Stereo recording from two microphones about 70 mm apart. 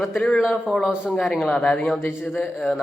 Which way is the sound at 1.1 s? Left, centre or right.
Centre.